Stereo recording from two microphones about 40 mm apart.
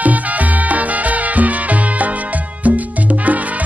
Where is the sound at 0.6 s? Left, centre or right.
Right.